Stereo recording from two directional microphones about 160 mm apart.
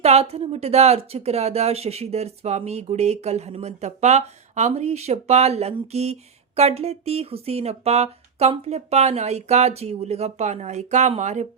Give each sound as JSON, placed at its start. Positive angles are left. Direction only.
{"t": 0.0, "sound": "speech", "side_deg": -40}